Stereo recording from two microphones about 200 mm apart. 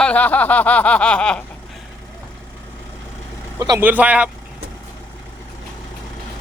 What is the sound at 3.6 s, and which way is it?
Speech, 15° right (ahead or behind).